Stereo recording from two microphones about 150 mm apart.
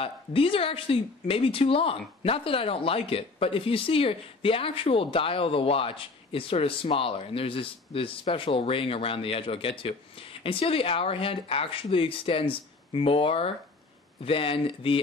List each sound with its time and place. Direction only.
0.0 s speech: 40° left (ahead or behind)